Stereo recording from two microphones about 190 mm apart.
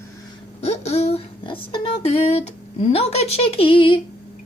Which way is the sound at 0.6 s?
35° left (ahead or behind).